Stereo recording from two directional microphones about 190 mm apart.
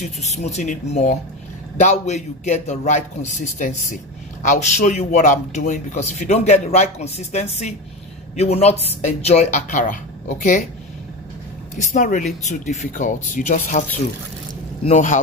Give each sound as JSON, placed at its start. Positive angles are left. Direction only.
{"t": 0.0, "sound": "a man's voice", "side_deg": 35}
{"t": 11.9, "sound": "a man's voice", "side_deg": 40}
{"t": 14.9, "sound": "speech", "side_deg": 45}